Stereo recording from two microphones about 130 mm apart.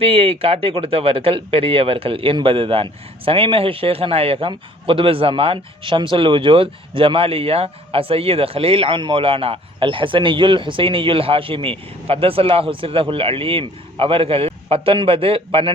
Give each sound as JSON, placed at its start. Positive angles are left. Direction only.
{"t": 0.0, "sound": "speech", "side_deg": -50}